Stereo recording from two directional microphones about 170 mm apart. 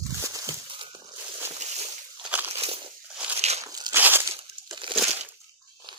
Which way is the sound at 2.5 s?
35° right (ahead or behind).